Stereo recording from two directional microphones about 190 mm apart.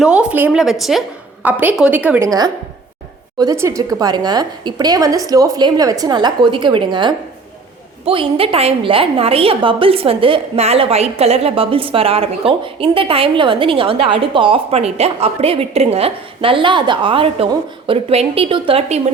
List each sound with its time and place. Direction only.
0.0 s a woman's voice: 5° right (ahead or behind); by 19.0 s 35° right (ahead or behind)